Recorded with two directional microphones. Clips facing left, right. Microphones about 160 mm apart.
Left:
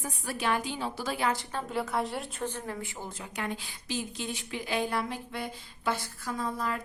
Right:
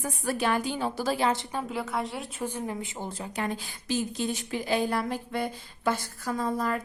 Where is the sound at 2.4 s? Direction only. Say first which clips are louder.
Right 6 dB; 15° right (ahead or behind).